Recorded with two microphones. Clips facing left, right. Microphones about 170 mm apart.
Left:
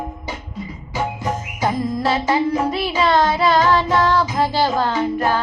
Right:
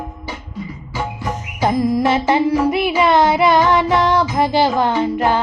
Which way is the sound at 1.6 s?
15° right (ahead or behind).